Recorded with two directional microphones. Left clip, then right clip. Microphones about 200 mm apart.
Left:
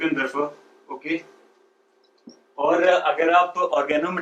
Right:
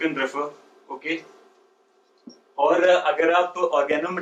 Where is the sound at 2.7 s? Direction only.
15° left (ahead or behind).